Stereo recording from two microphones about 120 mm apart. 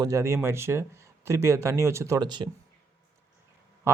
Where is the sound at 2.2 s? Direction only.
35° right (ahead or behind).